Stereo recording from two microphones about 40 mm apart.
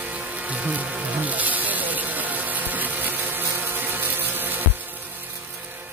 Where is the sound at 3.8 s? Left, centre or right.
Right.